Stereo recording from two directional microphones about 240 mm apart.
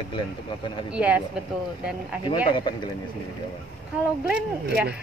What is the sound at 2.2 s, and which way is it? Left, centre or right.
Speech, centre.